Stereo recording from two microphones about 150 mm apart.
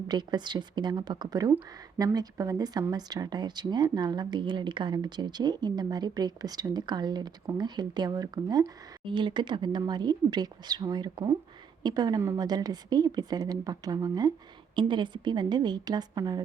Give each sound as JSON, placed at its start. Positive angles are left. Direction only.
{"t": 0.1, "sound": "speech", "side_deg": -30}